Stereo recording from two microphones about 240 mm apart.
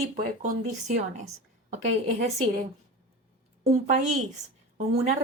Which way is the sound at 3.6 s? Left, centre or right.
Right.